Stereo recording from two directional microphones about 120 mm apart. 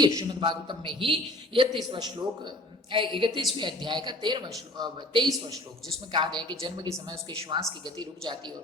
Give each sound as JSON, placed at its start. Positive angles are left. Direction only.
{"t": 0.0, "sound": "a man's voice", "side_deg": -40}